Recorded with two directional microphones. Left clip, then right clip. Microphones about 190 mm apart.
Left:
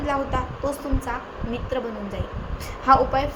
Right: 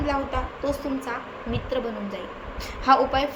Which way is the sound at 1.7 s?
10° left (ahead or behind).